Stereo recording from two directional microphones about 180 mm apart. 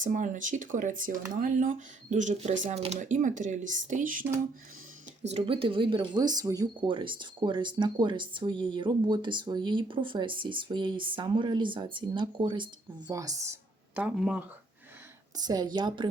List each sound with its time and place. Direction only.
0.0 s speech: 45° right (ahead or behind)
5.3 s speech: 30° right (ahead or behind); by 14.4 s 5° right (ahead or behind)
15.4 s speech: 20° right (ahead or behind)